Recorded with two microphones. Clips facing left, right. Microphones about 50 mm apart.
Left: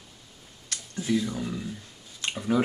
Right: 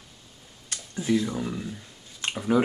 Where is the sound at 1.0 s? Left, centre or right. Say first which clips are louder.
Right 2 dB; centre.